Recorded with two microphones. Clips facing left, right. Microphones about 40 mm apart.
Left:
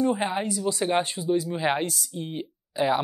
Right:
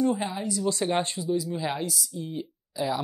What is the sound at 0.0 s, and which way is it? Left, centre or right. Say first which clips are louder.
Speech: left 2 dB; left.